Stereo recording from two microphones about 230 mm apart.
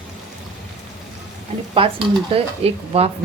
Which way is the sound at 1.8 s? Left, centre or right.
Right.